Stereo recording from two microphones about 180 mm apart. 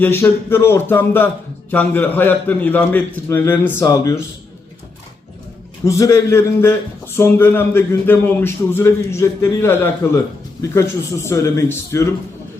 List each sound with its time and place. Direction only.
0.0 s speech: 10° left (ahead or behind)
5.8 s speech: 20° left (ahead or behind)